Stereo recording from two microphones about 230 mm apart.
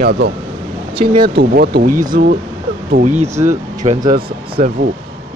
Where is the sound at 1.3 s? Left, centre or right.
Right.